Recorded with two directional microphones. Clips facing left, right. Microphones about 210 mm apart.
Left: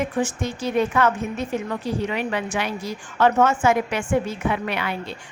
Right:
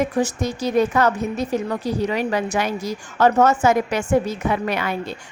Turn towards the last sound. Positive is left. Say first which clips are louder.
# right 3 dB
turn(degrees=-45)  # may be behind; listen again after turning